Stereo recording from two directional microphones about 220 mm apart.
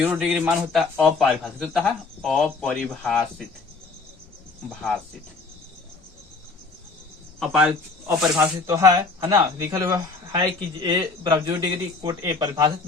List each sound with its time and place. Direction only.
0.0 s a man's voice: 5° right (ahead or behind)
7.3 s speech: centre (ahead or behind)